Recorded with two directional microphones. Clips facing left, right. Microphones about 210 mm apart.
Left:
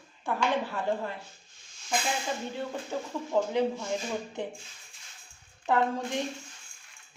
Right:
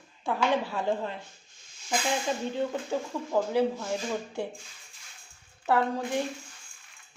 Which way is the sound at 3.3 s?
5° right (ahead or behind).